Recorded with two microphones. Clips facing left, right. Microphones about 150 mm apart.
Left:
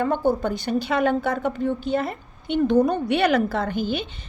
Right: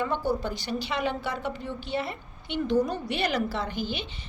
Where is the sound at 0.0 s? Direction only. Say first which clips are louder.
Left 6 dB; 50° left (ahead or behind).